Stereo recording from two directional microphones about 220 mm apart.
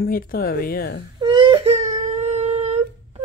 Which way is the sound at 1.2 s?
20° right (ahead or behind).